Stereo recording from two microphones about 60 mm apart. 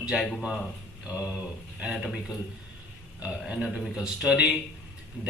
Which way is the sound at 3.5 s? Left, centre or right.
Centre.